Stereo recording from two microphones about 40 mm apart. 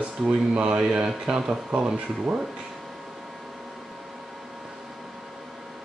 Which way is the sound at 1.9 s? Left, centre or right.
Right.